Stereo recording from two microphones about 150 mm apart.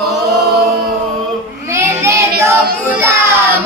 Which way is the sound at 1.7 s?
20° right (ahead or behind).